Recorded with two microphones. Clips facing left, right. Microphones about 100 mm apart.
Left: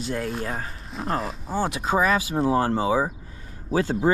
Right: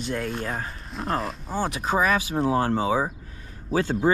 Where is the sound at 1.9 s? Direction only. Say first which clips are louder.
Left 1 dB; 30° left (ahead or behind).